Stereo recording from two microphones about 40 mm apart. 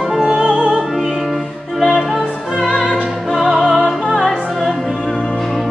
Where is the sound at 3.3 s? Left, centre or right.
Centre.